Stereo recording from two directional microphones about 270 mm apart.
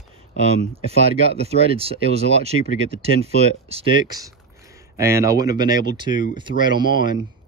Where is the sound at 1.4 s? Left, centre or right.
Right.